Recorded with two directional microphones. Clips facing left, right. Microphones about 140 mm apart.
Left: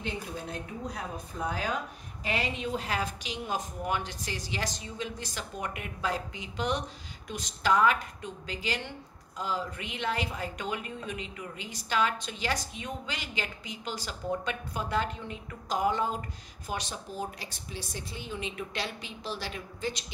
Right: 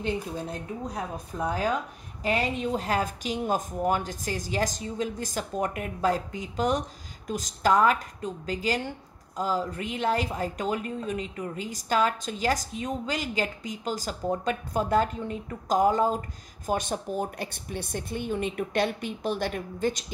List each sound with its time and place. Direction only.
0.0 s a woman's voice: 40° right (ahead or behind)